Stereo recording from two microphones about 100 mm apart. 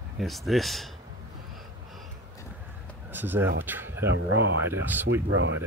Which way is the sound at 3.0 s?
20° right (ahead or behind).